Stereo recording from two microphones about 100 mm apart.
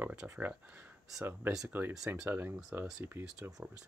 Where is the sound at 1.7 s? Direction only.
15° right (ahead or behind).